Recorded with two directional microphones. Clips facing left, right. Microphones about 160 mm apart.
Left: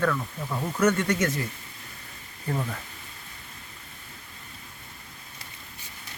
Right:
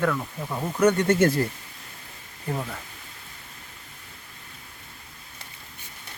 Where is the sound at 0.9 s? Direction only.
25° right (ahead or behind).